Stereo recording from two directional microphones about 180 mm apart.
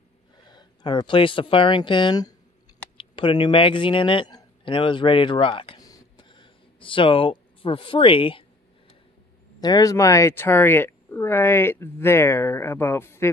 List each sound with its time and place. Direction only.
0.5 s speech: 25° left (ahead or behind)
9.6 s speech: 20° left (ahead or behind)